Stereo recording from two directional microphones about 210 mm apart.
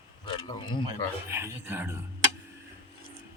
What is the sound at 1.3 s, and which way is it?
Speech, 10° right (ahead or behind).